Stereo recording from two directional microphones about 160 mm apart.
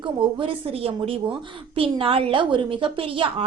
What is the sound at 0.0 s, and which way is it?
A woman's voice, 35° right (ahead or behind).